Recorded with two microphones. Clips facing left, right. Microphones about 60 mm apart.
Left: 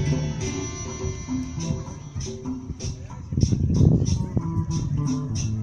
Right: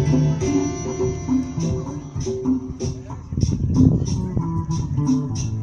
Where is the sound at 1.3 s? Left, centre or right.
Right.